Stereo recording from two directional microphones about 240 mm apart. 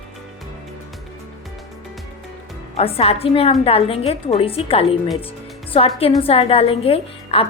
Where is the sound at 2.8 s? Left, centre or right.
Left.